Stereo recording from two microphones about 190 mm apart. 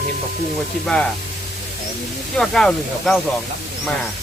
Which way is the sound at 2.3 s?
5° left (ahead or behind).